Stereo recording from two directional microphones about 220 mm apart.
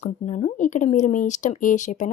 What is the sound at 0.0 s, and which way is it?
Speech, 30° left (ahead or behind).